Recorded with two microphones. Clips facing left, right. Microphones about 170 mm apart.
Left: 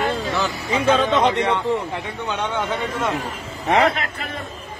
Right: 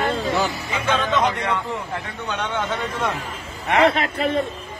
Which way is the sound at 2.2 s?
15° left (ahead or behind).